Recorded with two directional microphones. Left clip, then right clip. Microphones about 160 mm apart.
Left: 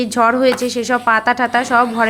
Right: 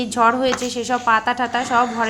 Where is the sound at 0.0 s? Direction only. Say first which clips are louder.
Left 3 dB; 20° left (ahead or behind).